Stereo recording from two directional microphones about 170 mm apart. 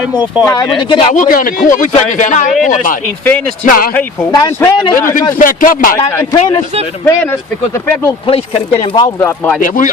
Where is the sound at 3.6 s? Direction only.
55° left (ahead or behind).